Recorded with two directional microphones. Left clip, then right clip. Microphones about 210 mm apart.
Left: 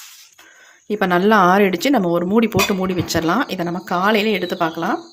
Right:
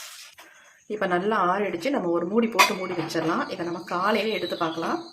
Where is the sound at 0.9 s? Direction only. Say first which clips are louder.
Left 9 dB; 50° left (ahead or behind).